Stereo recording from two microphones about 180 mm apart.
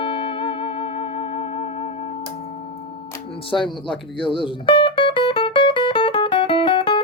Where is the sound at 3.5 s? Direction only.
10° left (ahead or behind).